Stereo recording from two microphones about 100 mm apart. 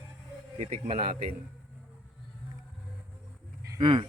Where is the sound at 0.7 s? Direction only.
90° right.